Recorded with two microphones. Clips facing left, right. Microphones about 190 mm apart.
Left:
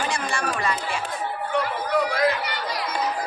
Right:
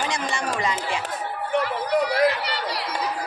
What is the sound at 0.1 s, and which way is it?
Chatter, 20° right (ahead or behind).